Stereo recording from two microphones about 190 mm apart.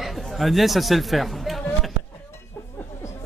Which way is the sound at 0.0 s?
Centre (ahead or behind).